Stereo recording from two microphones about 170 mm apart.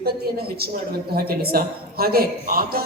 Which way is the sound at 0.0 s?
65° right (ahead or behind).